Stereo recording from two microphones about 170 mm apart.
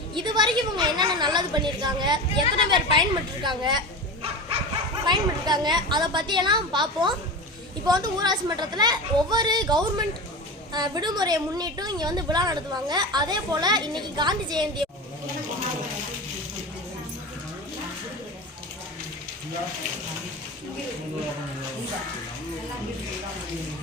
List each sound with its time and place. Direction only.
0.1 s a woman's voice: 25° right (ahead or behind)